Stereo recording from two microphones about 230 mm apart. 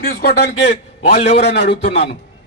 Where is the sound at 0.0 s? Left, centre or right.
Left.